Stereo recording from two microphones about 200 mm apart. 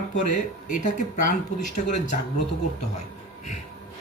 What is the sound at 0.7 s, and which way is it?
Speech, 40° left (ahead or behind).